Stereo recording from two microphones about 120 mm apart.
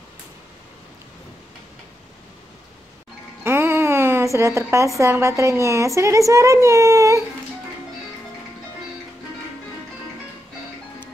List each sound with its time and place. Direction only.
3.4 s a woman's voice: 20° right (ahead or behind)